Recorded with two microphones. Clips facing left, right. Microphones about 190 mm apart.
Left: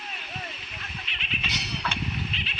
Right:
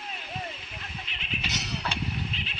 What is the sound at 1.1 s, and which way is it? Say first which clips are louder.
Music: left 1 dB; 80° left.